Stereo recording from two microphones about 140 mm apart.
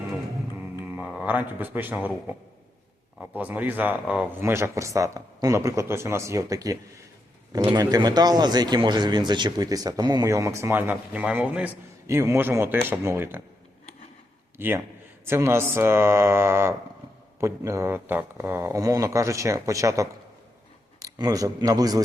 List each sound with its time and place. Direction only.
0.9 s a man's voice: 10° right (ahead or behind)
4.4 s a man's voice: 15° right (ahead or behind)
7.8 s a man's voice: 30° right (ahead or behind)
14.6 s a man's voice: 15° right (ahead or behind)